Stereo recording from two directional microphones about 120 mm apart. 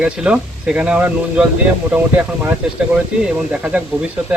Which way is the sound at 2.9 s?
10° right (ahead or behind).